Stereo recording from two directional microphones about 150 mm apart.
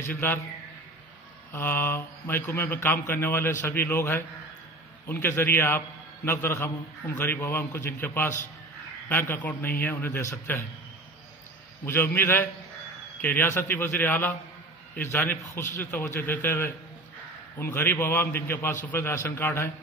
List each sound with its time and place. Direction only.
0.1 s speech: 15° left (ahead or behind)
1.5 s a man's voice: 15° left (ahead or behind)
11.8 s speech: 15° left (ahead or behind)